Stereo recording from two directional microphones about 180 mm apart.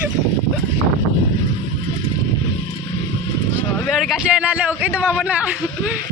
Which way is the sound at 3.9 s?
Centre (ahead or behind).